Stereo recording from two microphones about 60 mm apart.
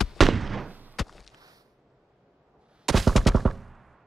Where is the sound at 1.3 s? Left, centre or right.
Right.